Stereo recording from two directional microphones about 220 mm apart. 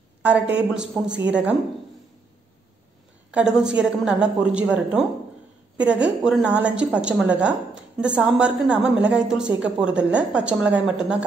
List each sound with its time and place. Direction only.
0.6 s a woman's voice: 5° right (ahead or behind)
3.3 s a woman's voice: 5° right (ahead or behind)